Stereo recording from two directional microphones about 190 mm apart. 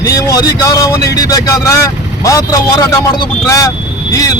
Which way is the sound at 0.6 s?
15° left (ahead or behind).